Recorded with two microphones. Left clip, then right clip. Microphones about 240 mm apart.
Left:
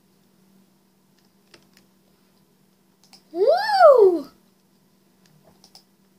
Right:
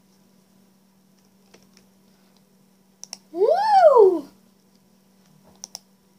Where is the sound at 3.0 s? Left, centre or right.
Right.